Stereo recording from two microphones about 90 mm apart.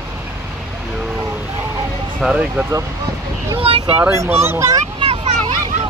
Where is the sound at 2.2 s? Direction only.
10° right (ahead or behind).